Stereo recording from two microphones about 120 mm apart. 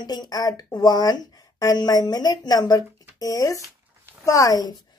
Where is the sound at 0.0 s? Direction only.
35° left (ahead or behind).